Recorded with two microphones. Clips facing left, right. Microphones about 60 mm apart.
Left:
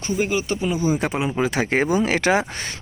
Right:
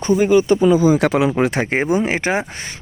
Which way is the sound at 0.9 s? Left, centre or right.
Right.